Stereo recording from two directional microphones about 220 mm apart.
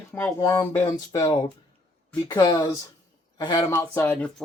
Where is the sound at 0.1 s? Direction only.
10° left (ahead or behind).